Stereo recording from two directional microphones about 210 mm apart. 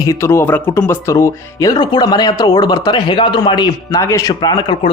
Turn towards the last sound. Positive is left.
turn(degrees=20)  # may be behind; listen again after turning